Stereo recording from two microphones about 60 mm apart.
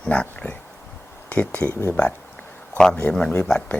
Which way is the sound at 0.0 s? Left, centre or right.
Centre.